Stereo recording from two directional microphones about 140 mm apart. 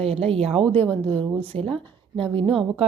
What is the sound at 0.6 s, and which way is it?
Speech, 10° left (ahead or behind).